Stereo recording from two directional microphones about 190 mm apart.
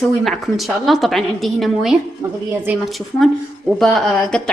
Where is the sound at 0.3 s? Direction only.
Centre (ahead or behind).